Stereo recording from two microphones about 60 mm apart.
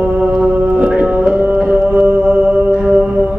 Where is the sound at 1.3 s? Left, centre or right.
Right.